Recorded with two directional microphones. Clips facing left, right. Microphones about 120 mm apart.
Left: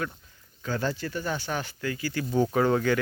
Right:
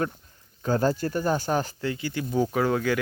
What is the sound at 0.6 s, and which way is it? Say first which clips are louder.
Speech: right 6 dB; 40° right (ahead or behind).